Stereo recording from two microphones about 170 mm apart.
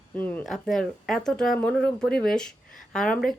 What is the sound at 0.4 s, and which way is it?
Speech, centre (ahead or behind).